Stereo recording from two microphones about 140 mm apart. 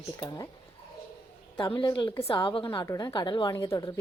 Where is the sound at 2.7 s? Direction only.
25° left (ahead or behind).